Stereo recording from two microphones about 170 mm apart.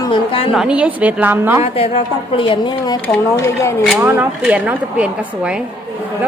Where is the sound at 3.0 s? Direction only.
15° left (ahead or behind).